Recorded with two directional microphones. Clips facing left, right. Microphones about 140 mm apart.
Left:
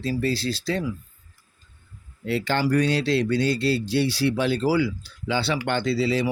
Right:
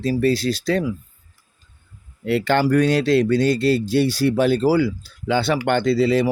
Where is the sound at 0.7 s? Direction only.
65° right (ahead or behind).